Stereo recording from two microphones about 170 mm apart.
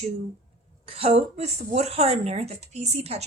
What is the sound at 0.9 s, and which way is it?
A woman's voice, 35° right (ahead or behind).